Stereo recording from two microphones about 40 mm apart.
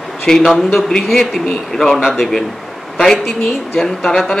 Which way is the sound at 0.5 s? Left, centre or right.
Centre.